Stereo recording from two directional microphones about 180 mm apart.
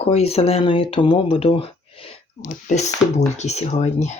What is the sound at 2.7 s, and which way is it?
Speech, 40° left (ahead or behind).